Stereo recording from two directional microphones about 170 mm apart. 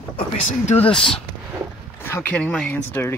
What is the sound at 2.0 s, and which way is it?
Speech, 15° left (ahead or behind).